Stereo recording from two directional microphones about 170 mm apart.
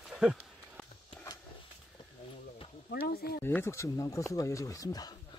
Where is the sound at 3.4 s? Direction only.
15° left (ahead or behind).